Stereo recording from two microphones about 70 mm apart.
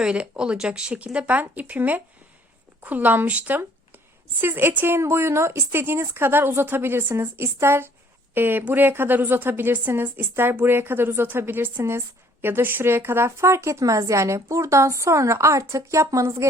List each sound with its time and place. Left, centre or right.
0.0 s speech: centre
3.6 s a woman's voice: right